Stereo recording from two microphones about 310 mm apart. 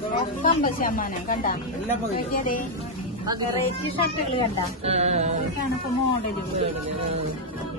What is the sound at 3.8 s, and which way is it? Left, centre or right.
Speech, centre.